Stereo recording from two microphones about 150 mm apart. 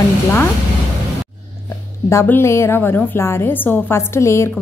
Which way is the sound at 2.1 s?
15° left (ahead or behind).